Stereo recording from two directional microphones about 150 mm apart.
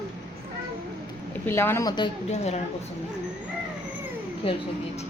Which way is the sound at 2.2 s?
45° left (ahead or behind).